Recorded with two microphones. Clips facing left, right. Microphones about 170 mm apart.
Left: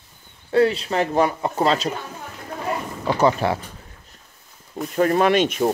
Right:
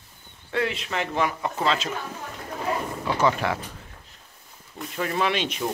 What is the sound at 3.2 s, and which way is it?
Speech, 35° left (ahead or behind).